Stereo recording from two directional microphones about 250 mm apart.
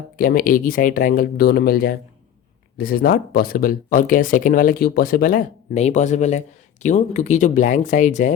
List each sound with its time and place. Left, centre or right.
0.2 s speech: left